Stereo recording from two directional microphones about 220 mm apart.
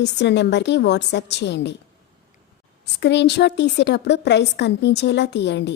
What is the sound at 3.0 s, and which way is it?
A woman's voice, 50° left (ahead or behind).